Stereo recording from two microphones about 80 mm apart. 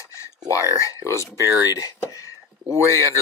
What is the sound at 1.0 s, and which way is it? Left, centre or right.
Speech, left.